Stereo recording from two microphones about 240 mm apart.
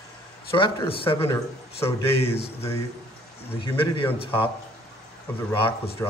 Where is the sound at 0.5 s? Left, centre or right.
Left.